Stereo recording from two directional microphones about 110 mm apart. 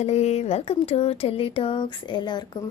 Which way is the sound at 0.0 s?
90° left.